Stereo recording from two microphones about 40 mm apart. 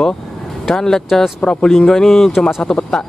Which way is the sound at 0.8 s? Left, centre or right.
Centre.